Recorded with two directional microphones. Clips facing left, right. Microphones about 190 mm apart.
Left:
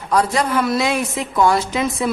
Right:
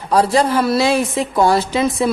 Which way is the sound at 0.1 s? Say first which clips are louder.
Right 3 dB; 30° right (ahead or behind).